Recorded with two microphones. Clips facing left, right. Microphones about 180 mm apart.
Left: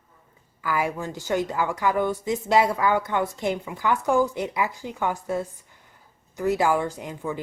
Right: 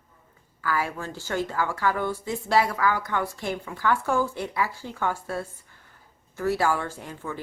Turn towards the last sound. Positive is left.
turn(degrees=15)  # may be behind; listen again after turning